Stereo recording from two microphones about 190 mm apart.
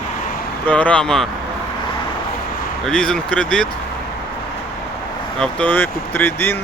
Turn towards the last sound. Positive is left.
turn(degrees=10)  # may be behind; listen again after turning